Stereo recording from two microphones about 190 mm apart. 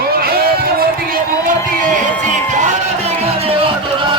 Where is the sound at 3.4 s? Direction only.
30° right (ahead or behind).